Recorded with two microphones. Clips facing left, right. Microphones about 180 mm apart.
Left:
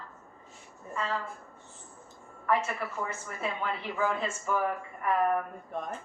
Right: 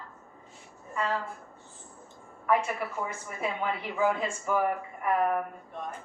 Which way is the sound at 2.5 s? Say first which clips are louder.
Right 2 dB; 15° right (ahead or behind).